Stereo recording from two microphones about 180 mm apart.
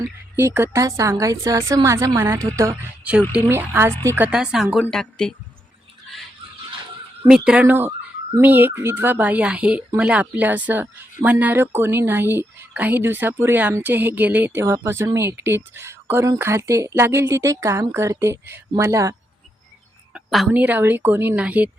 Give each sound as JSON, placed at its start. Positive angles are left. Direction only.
{"t": 0.3, "sound": "speech", "side_deg": -15}
{"t": 7.3, "sound": "speech", "side_deg": -5}
{"t": 20.1, "sound": "speech", "side_deg": -5}